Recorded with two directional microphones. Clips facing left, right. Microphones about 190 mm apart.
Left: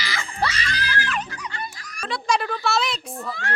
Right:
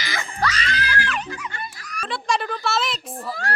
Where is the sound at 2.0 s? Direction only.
Centre (ahead or behind).